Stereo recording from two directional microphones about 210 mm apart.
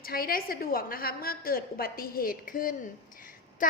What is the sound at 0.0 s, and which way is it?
A woman's voice, 45° left (ahead or behind).